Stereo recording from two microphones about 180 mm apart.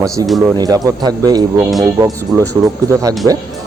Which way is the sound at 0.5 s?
20° right (ahead or behind).